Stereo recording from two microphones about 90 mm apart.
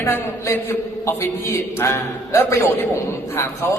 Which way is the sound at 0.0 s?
30° left (ahead or behind).